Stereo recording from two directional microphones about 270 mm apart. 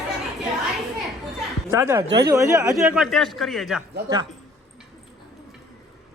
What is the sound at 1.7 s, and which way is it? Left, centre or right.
Speech, centre.